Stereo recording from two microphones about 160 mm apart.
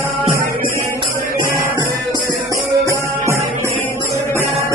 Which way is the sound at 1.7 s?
25° right (ahead or behind).